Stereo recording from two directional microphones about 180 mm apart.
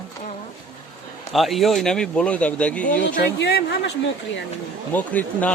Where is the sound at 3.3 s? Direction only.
70° left (ahead or behind).